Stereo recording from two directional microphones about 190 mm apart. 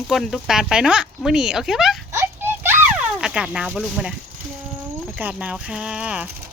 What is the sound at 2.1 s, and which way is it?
Children playing, 10° right (ahead or behind).